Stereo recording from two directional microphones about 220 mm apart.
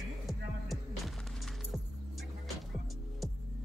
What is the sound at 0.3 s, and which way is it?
Music, centre (ahead or behind).